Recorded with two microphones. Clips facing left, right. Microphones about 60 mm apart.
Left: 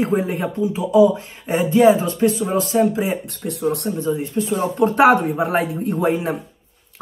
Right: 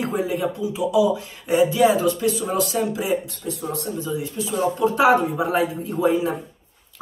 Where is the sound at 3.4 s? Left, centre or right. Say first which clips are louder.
Left 6 dB; left.